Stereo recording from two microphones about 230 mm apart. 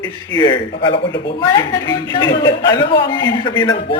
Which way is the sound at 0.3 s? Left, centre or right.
Centre.